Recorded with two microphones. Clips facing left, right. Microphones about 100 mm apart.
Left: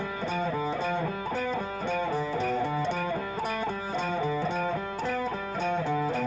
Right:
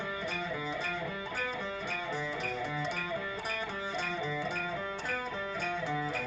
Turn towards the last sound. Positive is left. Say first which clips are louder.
# left 7 dB
turn(degrees=50)  # may be behind; listen again after turning